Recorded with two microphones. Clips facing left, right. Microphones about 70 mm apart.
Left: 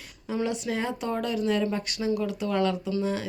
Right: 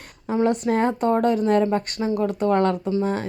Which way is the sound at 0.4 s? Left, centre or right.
Right.